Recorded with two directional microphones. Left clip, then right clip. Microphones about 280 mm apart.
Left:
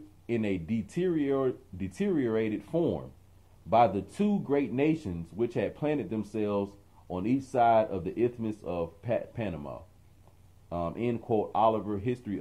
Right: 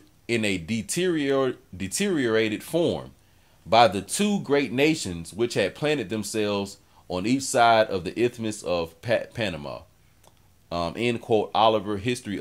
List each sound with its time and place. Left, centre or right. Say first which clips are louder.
0.3 s speech: right 6 dB; right